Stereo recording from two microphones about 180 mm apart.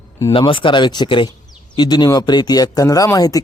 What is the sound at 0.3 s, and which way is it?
A man's voice, 30° left (ahead or behind).